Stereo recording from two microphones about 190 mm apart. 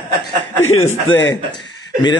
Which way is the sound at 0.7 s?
90° left.